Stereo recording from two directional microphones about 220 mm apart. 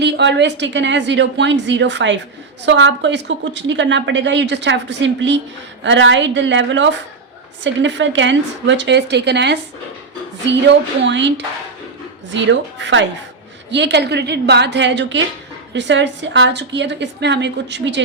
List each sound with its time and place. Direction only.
0.0 s a woman's voice: 50° right (ahead or behind)